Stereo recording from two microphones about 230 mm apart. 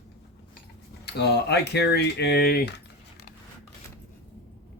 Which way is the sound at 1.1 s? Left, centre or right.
Left.